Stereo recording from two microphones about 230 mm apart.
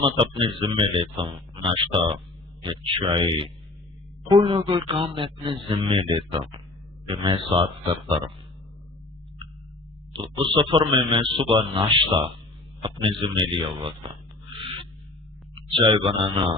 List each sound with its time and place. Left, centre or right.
0.0 s a man's voice: right
10.1 s a man's voice: right
15.5 s speech: right